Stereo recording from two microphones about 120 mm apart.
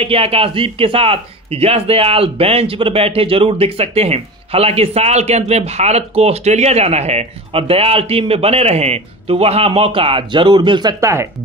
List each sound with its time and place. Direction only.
0.0 s a man's voice: 55° right (ahead or behind); by 11.2 s 25° right (ahead or behind)